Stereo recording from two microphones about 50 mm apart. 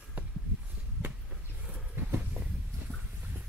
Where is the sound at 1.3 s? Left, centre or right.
Centre.